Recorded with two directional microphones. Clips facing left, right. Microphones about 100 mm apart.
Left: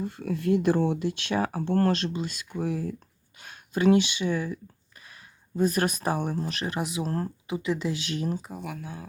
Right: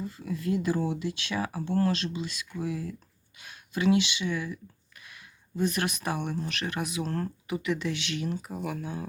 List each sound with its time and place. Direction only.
0.0 s speech: 60° left (ahead or behind); by 8.4 s 40° left (ahead or behind)
8.5 s speech: centre (ahead or behind)